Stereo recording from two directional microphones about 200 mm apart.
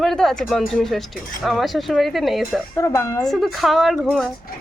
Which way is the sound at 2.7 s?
15° left (ahead or behind).